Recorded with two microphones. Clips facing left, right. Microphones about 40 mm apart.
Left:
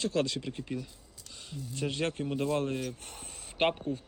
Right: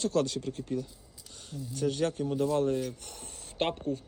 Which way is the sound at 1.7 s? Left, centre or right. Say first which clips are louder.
Right 3 dB; left.